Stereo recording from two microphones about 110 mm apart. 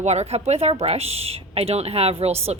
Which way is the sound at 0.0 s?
90° right.